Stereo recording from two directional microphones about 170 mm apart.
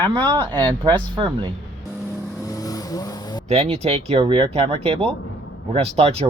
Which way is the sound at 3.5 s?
35° right (ahead or behind).